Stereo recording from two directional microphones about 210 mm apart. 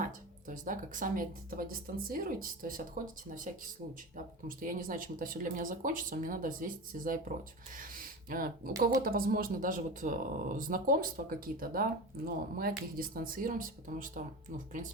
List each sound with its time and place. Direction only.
0.0 s speech: 40° right (ahead or behind)